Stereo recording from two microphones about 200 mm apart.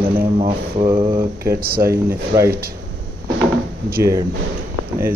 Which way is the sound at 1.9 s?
15° right (ahead or behind).